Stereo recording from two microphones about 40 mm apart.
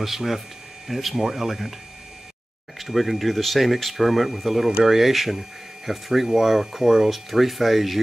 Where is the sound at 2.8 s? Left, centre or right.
Centre.